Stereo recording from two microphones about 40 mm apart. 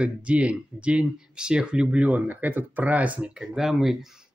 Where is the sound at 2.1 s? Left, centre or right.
Right.